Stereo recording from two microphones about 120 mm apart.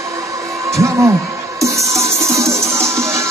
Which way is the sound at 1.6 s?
25° right (ahead or behind).